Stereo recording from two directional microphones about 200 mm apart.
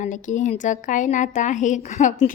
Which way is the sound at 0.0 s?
40° left (ahead or behind).